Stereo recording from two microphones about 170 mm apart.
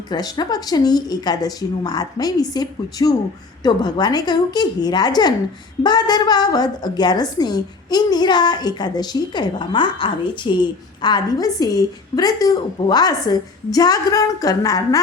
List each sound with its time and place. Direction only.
0.1 s a woman's voice: 25° left (ahead or behind)